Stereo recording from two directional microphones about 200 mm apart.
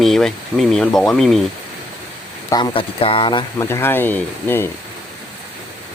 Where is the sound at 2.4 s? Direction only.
20° left (ahead or behind).